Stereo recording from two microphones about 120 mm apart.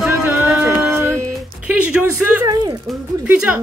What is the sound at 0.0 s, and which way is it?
Music, 20° right (ahead or behind).